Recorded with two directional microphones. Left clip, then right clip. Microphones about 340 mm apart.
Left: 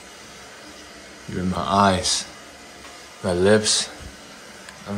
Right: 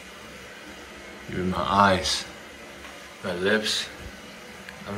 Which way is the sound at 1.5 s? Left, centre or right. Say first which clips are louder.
Left 1 dB; centre.